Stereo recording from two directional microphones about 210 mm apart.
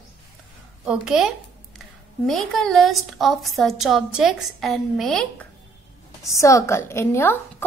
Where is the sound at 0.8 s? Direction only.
5° right (ahead or behind).